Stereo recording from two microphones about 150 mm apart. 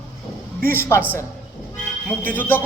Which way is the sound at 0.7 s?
15° left (ahead or behind).